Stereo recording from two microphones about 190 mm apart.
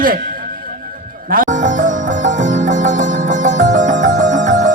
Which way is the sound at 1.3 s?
45° right (ahead or behind).